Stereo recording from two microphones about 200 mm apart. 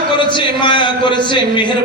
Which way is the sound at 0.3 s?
25° left (ahead or behind).